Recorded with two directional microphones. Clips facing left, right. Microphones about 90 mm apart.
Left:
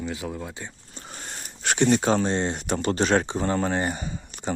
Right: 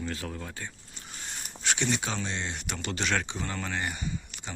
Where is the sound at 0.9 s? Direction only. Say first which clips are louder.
Left 4 dB; 45° left (ahead or behind).